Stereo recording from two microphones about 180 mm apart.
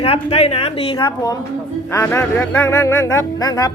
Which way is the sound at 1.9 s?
15° left (ahead or behind).